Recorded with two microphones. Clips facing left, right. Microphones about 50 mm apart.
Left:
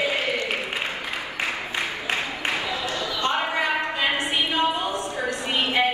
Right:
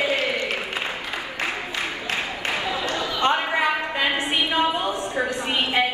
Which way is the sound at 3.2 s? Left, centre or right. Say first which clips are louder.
Right 3 dB; right.